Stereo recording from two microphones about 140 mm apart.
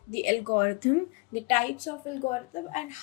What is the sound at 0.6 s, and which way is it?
A woman's voice, 50° left (ahead or behind).